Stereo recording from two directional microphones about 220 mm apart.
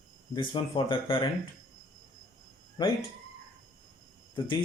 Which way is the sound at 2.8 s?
20° left (ahead or behind).